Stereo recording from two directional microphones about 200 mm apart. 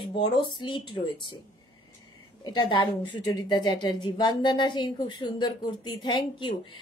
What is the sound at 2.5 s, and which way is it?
A woman's voice, 25° left (ahead or behind).